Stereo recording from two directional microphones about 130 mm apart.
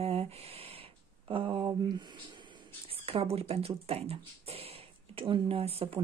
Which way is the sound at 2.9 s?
45° right (ahead or behind).